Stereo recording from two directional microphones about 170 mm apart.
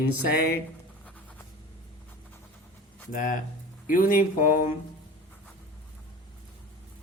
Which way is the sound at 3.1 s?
50° left (ahead or behind).